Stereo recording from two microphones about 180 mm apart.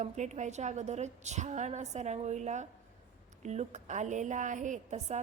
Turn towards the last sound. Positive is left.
turn(degrees=-40)  # may be behind; listen again after turning